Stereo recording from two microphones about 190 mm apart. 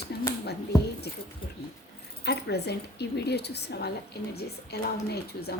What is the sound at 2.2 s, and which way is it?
A woman's voice, 60° left (ahead or behind).